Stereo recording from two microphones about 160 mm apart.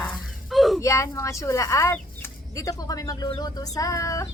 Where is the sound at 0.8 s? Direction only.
20° left (ahead or behind).